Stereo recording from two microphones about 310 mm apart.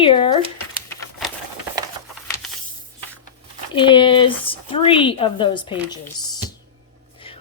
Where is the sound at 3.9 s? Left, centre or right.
Centre.